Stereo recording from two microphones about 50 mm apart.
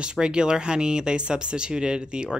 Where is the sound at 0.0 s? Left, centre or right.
Centre.